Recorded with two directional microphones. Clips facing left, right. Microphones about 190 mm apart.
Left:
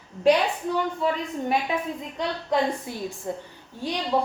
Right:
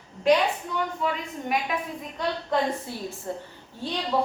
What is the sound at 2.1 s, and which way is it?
A woman's voice, 15° left (ahead or behind).